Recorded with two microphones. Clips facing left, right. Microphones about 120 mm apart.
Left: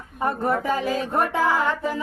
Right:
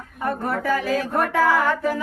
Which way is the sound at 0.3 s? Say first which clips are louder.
Even; 25° left (ahead or behind).